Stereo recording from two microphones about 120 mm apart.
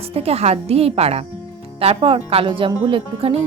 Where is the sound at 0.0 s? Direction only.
60° right (ahead or behind).